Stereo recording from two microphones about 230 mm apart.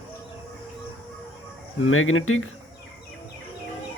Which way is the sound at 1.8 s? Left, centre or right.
Left.